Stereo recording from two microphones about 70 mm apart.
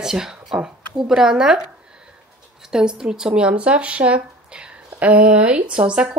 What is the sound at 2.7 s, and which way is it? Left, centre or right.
Speech, centre.